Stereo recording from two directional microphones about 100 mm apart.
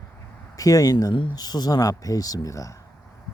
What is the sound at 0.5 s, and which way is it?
Speech, 35° left (ahead or behind).